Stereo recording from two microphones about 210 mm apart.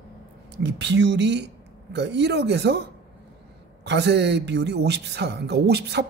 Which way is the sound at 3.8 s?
55° right (ahead or behind).